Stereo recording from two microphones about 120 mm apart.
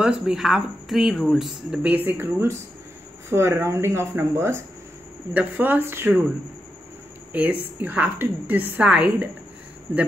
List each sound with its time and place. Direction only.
0.0 s a woman's voice: 5° right (ahead or behind)
7.3 s a woman's voice: 10° right (ahead or behind)